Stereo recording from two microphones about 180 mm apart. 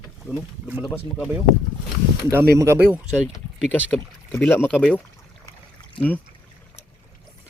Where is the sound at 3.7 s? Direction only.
5° left (ahead or behind).